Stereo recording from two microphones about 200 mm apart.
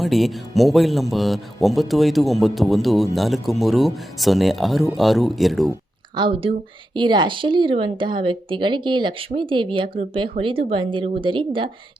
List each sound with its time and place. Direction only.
0.0 s speech: centre (ahead or behind)
6.1 s speech: 25° right (ahead or behind)